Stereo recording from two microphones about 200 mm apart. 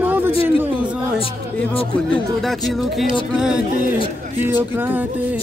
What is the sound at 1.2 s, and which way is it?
Speech, 30° left (ahead or behind).